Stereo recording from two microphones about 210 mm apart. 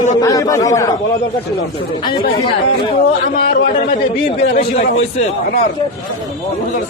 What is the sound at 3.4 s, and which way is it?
Speech, 45° left (ahead or behind).